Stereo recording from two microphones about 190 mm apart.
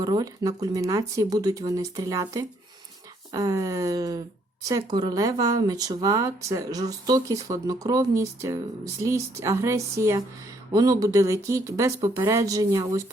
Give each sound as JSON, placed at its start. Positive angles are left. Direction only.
{"t": 0.0, "sound": "speech", "side_deg": -20}